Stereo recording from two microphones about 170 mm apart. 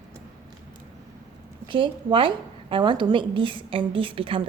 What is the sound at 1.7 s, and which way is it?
A woman's voice, 30° right (ahead or behind).